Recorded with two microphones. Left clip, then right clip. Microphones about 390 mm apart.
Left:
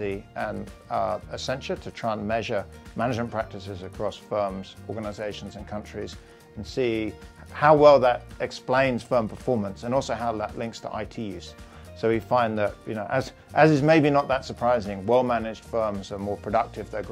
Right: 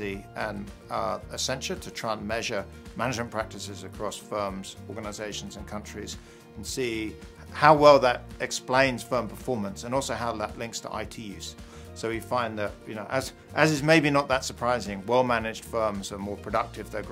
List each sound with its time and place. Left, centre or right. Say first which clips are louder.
0.0 s speech: left 3 dB; left
12.0 s speech: left 6 dB; left